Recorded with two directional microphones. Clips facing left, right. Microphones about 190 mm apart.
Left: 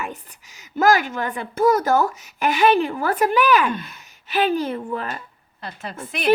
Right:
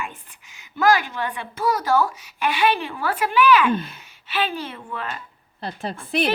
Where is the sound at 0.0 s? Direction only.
40° left (ahead or behind).